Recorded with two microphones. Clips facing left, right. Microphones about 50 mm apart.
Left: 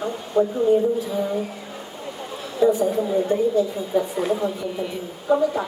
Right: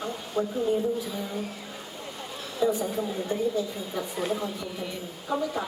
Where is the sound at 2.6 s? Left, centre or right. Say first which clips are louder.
Left 8 dB; centre.